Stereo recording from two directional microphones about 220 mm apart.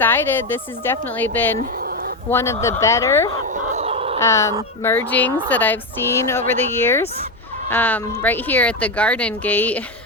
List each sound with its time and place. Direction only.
0.0 s speech: 10° left (ahead or behind)
1.8 s a sound: 45° right (ahead or behind)
2.3 s speech: 10° left (ahead or behind)
3.4 s fowl: 35° right (ahead or behind)
4.2 s speech: 15° left (ahead or behind)